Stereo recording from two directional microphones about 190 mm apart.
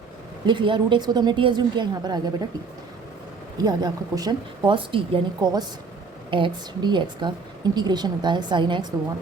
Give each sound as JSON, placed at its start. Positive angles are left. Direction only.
{"t": 0.4, "sound": "a woman's voice", "side_deg": -25}
{"t": 3.6, "sound": "a woman's voice", "side_deg": -20}